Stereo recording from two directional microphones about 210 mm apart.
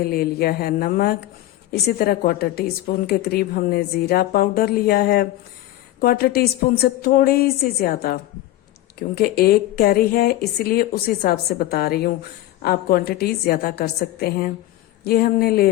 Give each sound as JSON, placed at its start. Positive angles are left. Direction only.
{"t": 0.0, "sound": "speech", "side_deg": 45}